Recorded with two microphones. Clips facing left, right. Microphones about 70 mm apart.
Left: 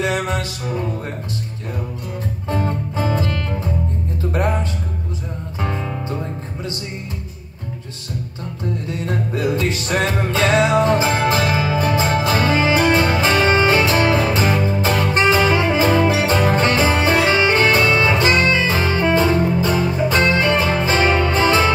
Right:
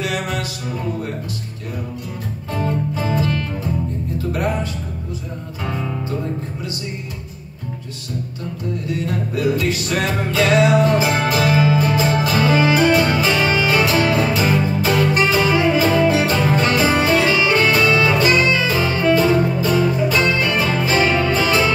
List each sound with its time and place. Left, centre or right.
0.0 s music: left
2.5 s music: left
5.6 s music: left
9.0 s music: left